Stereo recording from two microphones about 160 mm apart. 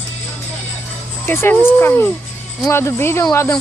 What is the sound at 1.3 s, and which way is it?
Speech, 15° left (ahead or behind).